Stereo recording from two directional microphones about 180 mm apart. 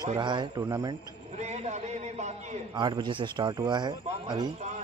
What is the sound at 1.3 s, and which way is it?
A man's voice, 35° right (ahead or behind).